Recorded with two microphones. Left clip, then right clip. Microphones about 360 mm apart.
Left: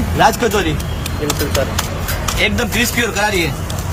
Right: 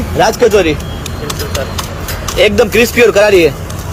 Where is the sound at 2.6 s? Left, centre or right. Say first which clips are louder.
Right 9 dB; centre.